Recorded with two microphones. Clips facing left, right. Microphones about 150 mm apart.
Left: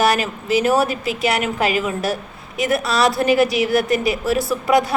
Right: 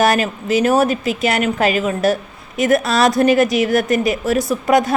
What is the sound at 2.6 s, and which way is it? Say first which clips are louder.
A woman's voice: right 4 dB; 50° right (ahead or behind).